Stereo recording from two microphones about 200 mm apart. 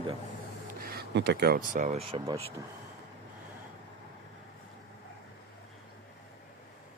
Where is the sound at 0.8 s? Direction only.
50° right (ahead or behind); by 2.2 s 30° right (ahead or behind).